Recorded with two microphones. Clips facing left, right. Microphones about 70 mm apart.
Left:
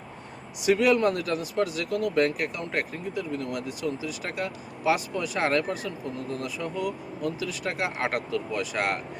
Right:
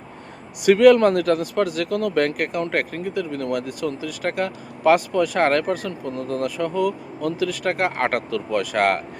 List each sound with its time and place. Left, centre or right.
0.6 s speech: right